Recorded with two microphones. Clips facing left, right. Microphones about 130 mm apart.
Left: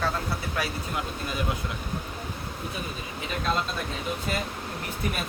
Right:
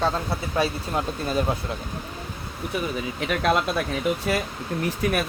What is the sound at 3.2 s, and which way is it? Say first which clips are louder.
Speech: right 6 dB; 75° right (ahead or behind).